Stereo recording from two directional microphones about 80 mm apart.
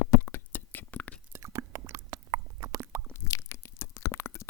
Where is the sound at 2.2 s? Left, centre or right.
Right.